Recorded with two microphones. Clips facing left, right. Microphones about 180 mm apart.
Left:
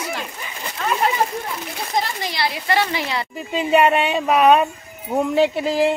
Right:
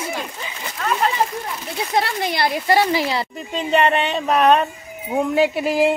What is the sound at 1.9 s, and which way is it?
Speech, 60° right (ahead or behind).